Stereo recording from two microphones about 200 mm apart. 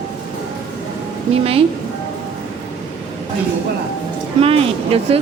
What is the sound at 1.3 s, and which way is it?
Speech, 30° right (ahead or behind).